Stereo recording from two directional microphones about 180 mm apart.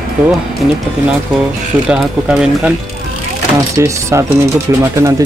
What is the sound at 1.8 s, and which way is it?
Speech, 5° right (ahead or behind).